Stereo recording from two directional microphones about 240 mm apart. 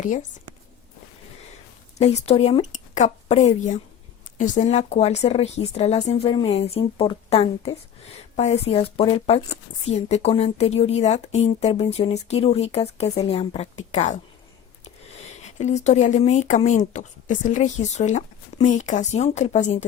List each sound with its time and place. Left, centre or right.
2.0 s speech: left
15.4 s speech: left